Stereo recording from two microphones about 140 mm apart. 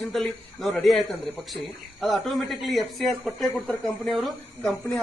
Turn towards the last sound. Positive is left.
turn(degrees=0)  # may be behind; listen again after turning